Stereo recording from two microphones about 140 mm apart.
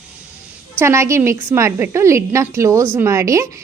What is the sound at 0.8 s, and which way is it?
A woman's voice, 20° right (ahead or behind).